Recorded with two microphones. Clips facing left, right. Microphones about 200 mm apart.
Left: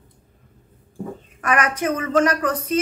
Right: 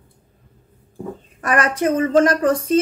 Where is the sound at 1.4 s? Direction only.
35° right (ahead or behind).